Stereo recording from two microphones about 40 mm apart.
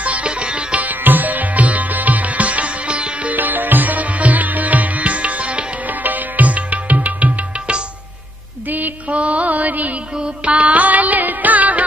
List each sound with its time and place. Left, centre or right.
0.0 s sitar: right
0.7 s sitar: right
3.3 s music: right
5.9 s music: right
8.6 s music: right
9.1 s music: right
10.1 s music: right